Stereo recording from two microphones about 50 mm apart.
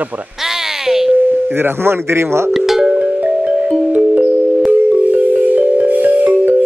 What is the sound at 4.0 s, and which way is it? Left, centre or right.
Music, centre.